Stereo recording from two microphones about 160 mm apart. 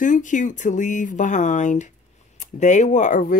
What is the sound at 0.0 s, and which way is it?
Speech, 50° left (ahead or behind).